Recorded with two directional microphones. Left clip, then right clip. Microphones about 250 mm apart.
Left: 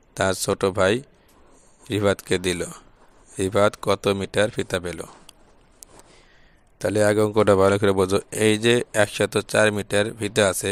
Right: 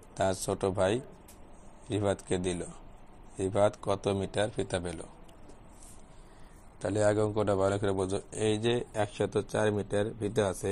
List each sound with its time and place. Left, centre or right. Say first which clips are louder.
0.1 s a man's voice: left 8 dB; left
6.8 s speech: left 8 dB; left
9.2 s speech: left 7 dB; left